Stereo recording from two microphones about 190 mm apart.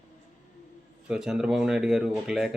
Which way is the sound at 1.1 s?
5° right (ahead or behind).